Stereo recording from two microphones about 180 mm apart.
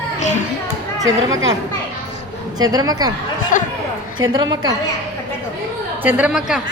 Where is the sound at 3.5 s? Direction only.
45° left (ahead or behind).